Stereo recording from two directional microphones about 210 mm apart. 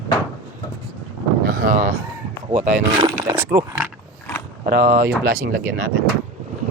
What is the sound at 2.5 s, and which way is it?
Speech, 35° right (ahead or behind).